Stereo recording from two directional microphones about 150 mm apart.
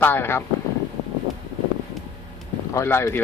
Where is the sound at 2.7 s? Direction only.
15° left (ahead or behind).